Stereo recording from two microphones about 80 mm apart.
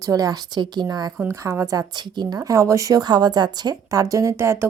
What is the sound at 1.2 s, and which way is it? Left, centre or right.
Speech, right.